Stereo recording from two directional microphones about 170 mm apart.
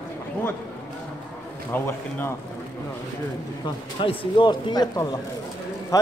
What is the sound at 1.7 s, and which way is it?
Speech, 15° left (ahead or behind).